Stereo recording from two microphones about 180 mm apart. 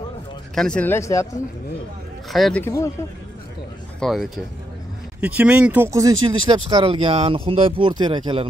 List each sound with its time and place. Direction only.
0.6 s speech: 5° left (ahead or behind)
2.3 s speech: centre (ahead or behind)
2.6 s speech: 15° left (ahead or behind)
4.0 s speech: centre (ahead or behind); by 8.5 s 25° right (ahead or behind)